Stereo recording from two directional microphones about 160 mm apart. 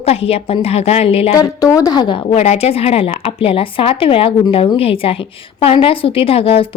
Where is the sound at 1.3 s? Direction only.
20° left (ahead or behind).